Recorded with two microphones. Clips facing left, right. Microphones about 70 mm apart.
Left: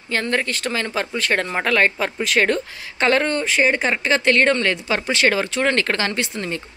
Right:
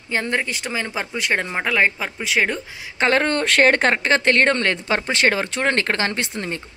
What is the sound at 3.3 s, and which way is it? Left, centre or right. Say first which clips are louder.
Speech: right 2 dB; right.